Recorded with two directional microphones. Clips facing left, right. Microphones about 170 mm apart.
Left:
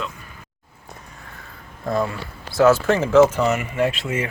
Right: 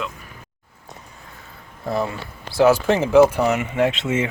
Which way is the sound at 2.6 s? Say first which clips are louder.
Even; 15° right (ahead or behind).